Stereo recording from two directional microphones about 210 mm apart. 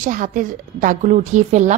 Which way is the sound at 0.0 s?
40° right (ahead or behind).